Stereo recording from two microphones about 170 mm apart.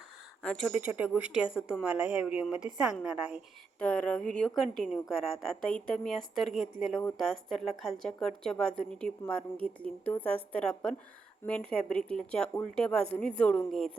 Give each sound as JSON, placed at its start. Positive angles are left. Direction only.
{"t": 0.4, "sound": "a woman's voice", "side_deg": 0}
{"t": 3.8, "sound": "a woman's voice", "side_deg": 5}